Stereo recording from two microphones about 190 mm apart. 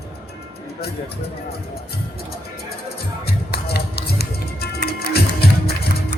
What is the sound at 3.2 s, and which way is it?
Music, 55° left (ahead or behind).